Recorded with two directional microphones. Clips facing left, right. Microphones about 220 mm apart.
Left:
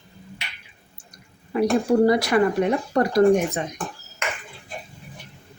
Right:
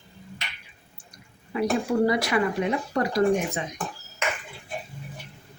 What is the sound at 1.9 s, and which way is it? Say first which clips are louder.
Speech: left 6 dB; 40° left (ahead or behind).